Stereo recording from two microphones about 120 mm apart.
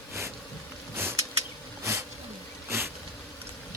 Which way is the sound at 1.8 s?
20° right (ahead or behind).